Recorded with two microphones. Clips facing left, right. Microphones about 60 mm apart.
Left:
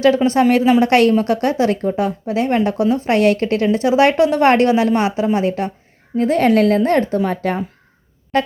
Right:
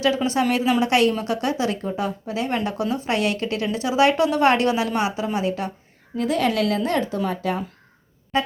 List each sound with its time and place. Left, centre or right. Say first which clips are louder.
0.5 s a woman's voice: left 7 dB; left